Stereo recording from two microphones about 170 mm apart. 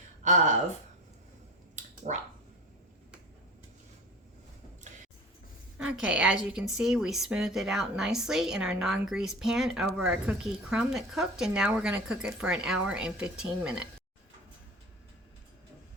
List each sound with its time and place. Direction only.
1.8 s finger snapping: 45° right (ahead or behind)
5.7 s a woman's voice: 5° right (ahead or behind)